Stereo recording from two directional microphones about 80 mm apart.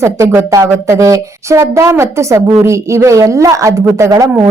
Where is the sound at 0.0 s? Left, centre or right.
Right.